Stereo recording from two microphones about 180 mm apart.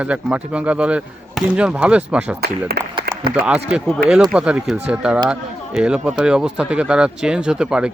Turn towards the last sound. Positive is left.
turn(degrees=-5)  # may be behind; listen again after turning